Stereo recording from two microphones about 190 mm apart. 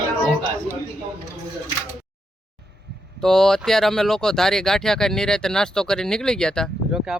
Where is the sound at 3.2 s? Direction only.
Centre (ahead or behind).